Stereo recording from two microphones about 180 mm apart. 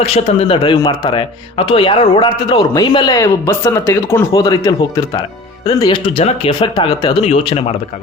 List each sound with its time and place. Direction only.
0.0 s a man's voice: 35° left (ahead or behind)
6.1 s speech: 30° left (ahead or behind)